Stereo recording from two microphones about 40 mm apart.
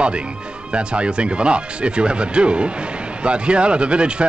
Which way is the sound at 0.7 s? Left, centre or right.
Right.